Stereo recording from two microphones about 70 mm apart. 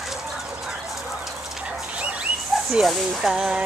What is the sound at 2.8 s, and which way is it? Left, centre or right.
Speech, centre.